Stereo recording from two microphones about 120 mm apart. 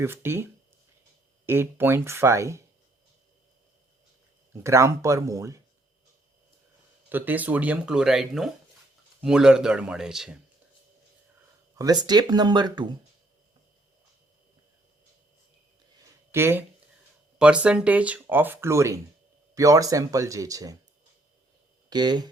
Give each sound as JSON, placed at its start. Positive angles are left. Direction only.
{"t": 0.0, "sound": "speech", "side_deg": -20}
{"t": 4.5, "sound": "speech", "side_deg": -25}
{"t": 7.1, "sound": "a man's voice", "side_deg": -15}
{"t": 11.8, "sound": "speech", "side_deg": -35}
{"t": 16.3, "sound": "speech", "side_deg": -20}
{"t": 17.3, "sound": "speech", "side_deg": -10}
{"t": 21.8, "sound": "speech", "side_deg": -35}